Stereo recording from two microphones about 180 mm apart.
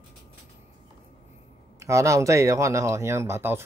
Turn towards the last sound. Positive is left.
turn(degrees=-15)  # may be behind; listen again after turning